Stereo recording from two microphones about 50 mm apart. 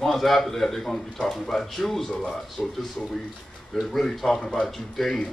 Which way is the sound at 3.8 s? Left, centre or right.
Centre.